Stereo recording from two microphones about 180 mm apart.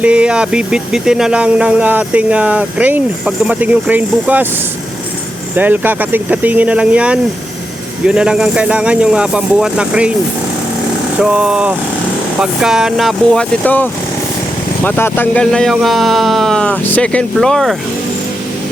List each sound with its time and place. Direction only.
0.0 s speech: 5° right (ahead or behind)
5.5 s speech: 10° right (ahead or behind)
11.2 s speech: 5° right (ahead or behind)